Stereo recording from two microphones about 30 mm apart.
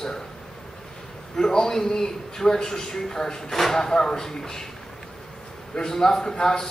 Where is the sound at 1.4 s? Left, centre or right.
Left.